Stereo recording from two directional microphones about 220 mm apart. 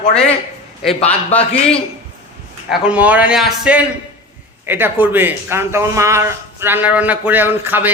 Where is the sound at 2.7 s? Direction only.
5° right (ahead or behind).